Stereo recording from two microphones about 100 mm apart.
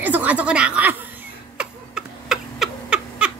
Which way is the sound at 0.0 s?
15° right (ahead or behind).